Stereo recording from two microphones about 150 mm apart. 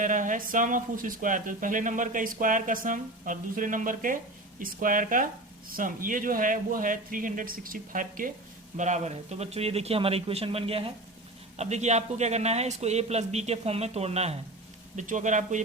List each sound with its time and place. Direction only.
0.0 s speech: 60° right (ahead or behind)
8.8 s a man's voice: 50° right (ahead or behind)
14.9 s speech: 55° right (ahead or behind)